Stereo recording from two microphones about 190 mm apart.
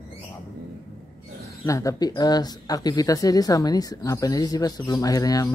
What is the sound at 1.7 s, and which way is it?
Speech, 15° left (ahead or behind).